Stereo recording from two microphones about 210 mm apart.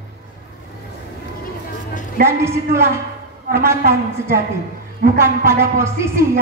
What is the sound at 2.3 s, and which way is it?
A woman's voice, 10° right (ahead or behind).